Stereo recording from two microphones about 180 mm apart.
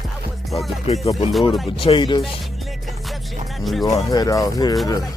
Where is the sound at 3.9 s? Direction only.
20° left (ahead or behind).